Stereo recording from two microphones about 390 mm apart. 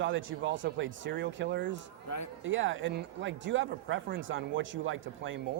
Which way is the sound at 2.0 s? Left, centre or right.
Left.